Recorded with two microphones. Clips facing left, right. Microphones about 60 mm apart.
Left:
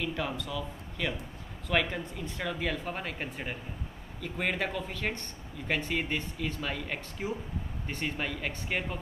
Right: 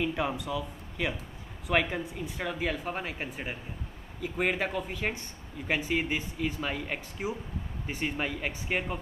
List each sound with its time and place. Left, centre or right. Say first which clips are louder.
0.0 s speech: right 3 dB; centre